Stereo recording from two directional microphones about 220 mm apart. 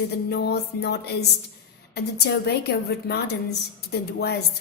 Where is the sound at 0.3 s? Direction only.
50° left (ahead or behind).